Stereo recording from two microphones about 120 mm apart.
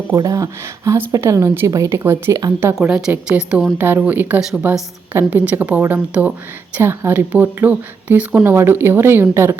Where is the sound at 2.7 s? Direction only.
10° right (ahead or behind).